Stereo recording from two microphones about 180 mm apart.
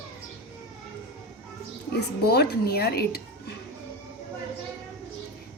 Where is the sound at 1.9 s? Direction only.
60° left (ahead or behind).